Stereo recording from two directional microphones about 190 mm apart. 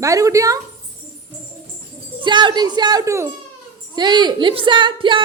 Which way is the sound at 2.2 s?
25° right (ahead or behind).